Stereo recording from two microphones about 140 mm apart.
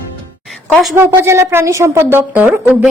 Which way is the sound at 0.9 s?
15° right (ahead or behind).